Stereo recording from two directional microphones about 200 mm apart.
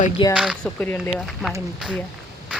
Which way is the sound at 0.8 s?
10° left (ahead or behind).